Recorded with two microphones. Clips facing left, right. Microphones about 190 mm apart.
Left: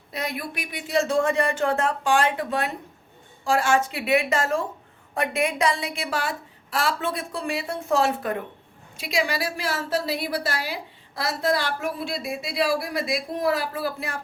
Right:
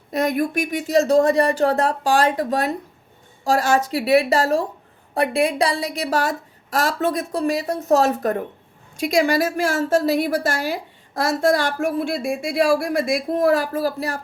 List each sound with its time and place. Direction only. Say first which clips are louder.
0.1 s a woman's voice: right 11 dB; 45° right (ahead or behind)